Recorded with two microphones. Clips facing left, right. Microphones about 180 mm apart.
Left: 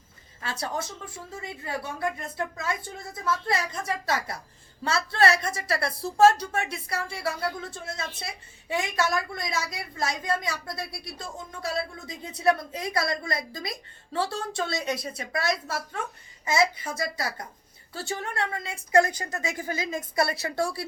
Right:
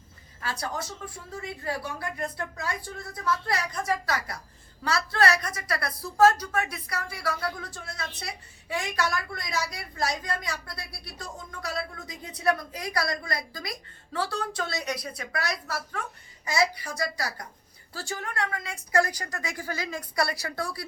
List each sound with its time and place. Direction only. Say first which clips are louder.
0.4 s a woman's voice: left 1 dB; 25° left (ahead or behind)
2.6 s a woman's voice: left 2 dB; 25° left (ahead or behind)